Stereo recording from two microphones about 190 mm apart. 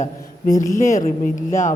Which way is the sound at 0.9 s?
40° left (ahead or behind).